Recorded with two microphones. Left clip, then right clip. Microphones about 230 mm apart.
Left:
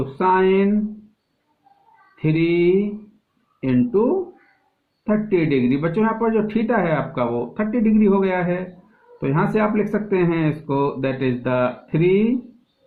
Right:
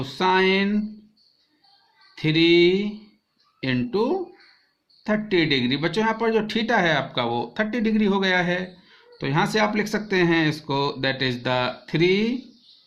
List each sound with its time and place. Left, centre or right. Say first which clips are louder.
0.2 s speech: left 3 dB; right
2.2 s speech: right 1 dB; right
5.0 s speech: left 2 dB; right